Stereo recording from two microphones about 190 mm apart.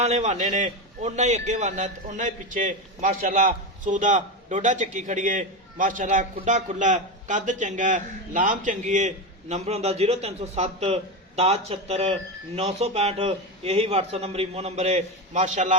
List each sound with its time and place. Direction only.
0.0 s a man's voice: 35° right (ahead or behind)